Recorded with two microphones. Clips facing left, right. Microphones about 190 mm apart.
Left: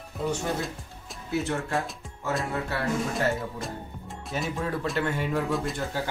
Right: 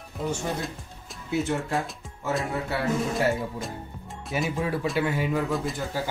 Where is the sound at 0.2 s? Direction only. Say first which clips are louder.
Left 1 dB; centre (ahead or behind).